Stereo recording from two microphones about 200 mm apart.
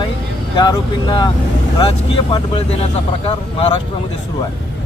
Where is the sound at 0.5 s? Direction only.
20° left (ahead or behind).